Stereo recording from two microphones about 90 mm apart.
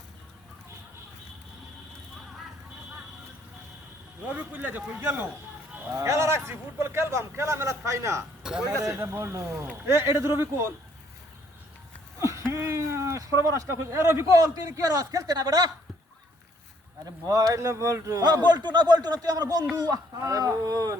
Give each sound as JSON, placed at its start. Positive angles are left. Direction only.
{"t": 4.2, "sound": "a man's voice", "side_deg": -20}
{"t": 6.0, "sound": "a man's voice", "side_deg": -35}
{"t": 12.2, "sound": "speech", "side_deg": -30}
{"t": 17.2, "sound": "speech", "side_deg": -40}
{"t": 18.2, "sound": "a man's voice", "side_deg": -50}